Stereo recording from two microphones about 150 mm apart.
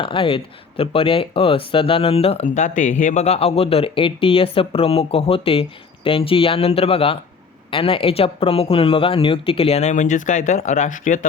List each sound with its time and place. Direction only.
0.0 s speech: 35° left (ahead or behind)
2.6 s speech: 55° left (ahead or behind)